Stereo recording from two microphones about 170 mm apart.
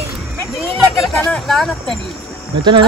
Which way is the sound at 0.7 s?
Centre (ahead or behind).